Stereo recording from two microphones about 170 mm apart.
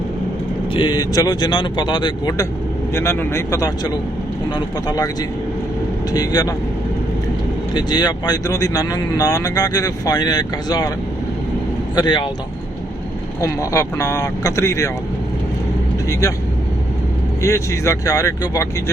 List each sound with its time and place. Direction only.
0.7 s speech: 25° left (ahead or behind)
6.1 s speech: 20° left (ahead or behind)
7.7 s speech: 25° left (ahead or behind)
11.9 s speech: 25° left (ahead or behind)
13.4 s speech: 20° left (ahead or behind)
17.4 s speech: 15° left (ahead or behind)